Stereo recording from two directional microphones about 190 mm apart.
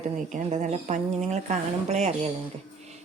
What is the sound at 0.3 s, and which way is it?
Speech, 40° right (ahead or behind).